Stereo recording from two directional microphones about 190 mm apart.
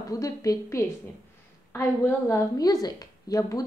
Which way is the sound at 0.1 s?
20° left (ahead or behind).